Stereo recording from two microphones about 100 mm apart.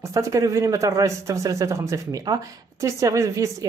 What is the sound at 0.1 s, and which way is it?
Speech, 30° right (ahead or behind).